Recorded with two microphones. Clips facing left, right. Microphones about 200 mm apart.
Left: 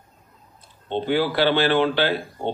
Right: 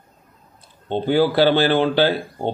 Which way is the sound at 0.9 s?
40° right (ahead or behind).